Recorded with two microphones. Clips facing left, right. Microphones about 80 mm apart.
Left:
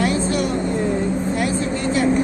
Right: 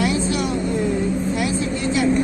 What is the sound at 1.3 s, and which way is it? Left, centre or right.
Vehicle, left.